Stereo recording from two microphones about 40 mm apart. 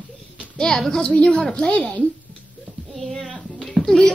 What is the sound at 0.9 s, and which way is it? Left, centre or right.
A woman's voice, left.